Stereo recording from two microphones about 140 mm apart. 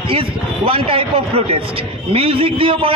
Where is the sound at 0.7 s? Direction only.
40° right (ahead or behind).